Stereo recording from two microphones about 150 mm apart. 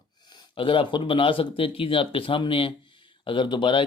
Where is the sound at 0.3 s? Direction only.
30° left (ahead or behind).